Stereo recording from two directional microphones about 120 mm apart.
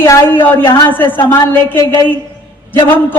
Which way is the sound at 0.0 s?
20° left (ahead or behind).